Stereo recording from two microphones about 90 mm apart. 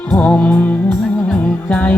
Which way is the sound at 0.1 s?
15° left (ahead or behind).